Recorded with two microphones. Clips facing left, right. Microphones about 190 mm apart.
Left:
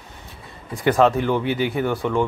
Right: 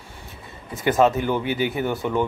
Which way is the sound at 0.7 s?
Centre (ahead or behind).